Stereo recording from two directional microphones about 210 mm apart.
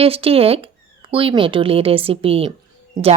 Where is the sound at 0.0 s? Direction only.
25° right (ahead or behind).